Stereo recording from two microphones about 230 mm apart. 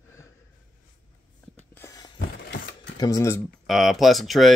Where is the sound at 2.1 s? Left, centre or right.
Left.